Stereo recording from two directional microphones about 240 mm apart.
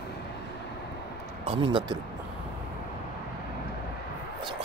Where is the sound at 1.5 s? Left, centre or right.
Right.